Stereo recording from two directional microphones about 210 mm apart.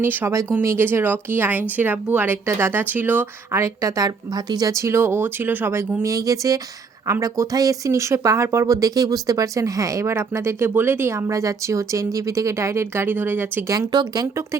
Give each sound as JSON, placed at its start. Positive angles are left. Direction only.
{"t": 0.0, "sound": "speech", "side_deg": -10}